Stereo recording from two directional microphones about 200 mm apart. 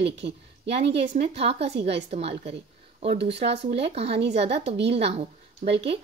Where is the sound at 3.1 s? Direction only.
60° right (ahead or behind).